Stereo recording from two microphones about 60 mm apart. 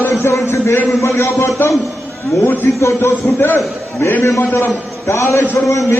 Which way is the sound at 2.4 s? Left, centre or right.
Left.